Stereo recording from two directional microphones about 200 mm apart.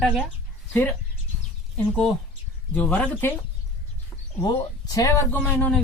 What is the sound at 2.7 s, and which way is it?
Speech, 10° left (ahead or behind).